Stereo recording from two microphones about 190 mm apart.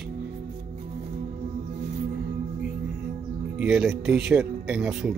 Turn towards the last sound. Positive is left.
turn(degrees=-5)  # may be behind; listen again after turning